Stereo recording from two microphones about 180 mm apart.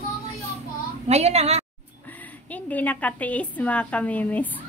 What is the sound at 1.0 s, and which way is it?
Speech, 35° right (ahead or behind).